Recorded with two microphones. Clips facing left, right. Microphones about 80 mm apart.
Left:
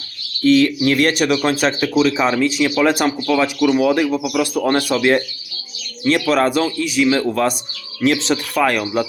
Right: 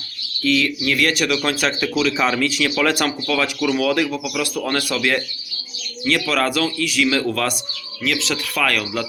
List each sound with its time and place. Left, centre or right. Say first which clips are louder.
0.4 s speech: left 6 dB; left
8.0 s speech: left 6 dB; left